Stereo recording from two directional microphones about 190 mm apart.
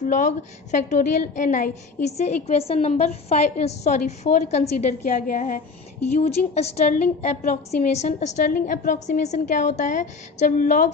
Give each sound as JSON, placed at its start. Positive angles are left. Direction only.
{"t": 0.0, "sound": "a woman's voice", "side_deg": 40}
{"t": 6.1, "sound": "a woman's voice", "side_deg": 35}
{"t": 8.5, "sound": "a woman's voice", "side_deg": 50}